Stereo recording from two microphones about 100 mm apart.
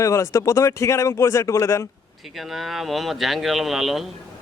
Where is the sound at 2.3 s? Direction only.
Centre (ahead or behind).